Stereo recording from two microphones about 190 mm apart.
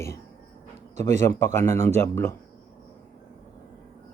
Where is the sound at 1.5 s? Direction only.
15° left (ahead or behind).